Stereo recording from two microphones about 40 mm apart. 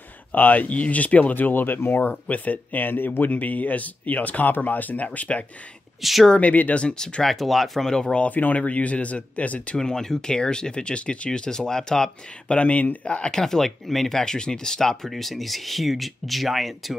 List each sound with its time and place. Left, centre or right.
0.3 s speech: left
1.3 s speech: left
2.3 s speech: left
3.3 s speech: left
6.0 s speech: centre
6.3 s speech: left
6.8 s speech: left
7.2 s speech: centre
7.8 s speech: centre
8.3 s speech: left
9.8 s speech: centre
12.4 s speech: left
13.3 s speech: centre
15.0 s speech: centre